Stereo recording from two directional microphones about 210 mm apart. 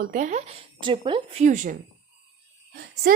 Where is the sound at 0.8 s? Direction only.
25° right (ahead or behind).